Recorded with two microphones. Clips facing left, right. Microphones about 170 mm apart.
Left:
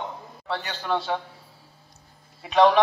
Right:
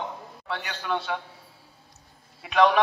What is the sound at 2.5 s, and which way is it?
Speech, 35° left (ahead or behind).